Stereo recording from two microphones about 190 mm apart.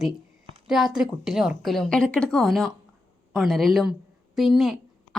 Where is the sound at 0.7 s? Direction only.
Centre (ahead or behind).